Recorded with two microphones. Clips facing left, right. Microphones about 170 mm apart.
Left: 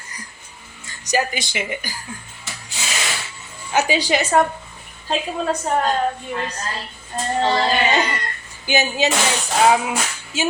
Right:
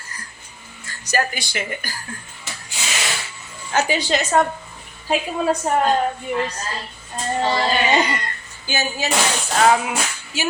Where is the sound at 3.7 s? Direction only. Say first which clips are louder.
Left 1 dB; 15° left (ahead or behind).